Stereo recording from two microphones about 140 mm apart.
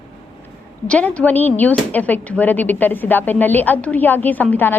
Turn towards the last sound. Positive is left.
turn(degrees=10)  # may be behind; listen again after turning